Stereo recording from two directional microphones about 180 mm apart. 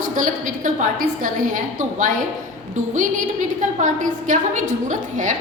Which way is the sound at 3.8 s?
45° right (ahead or behind).